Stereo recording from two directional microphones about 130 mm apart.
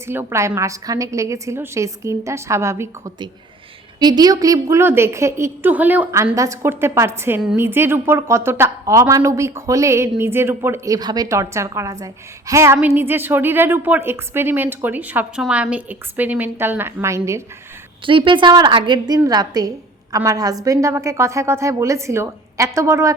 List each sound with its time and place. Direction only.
0.1 s a woman's voice: 20° right (ahead or behind)
4.0 s a woman's voice: 30° right (ahead or behind)
18.0 s a woman's voice: 40° right (ahead or behind); by 23.1 s 25° right (ahead or behind)